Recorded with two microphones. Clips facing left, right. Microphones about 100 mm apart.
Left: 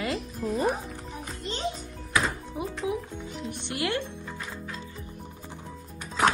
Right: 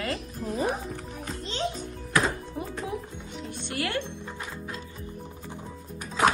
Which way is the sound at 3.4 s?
20° left (ahead or behind).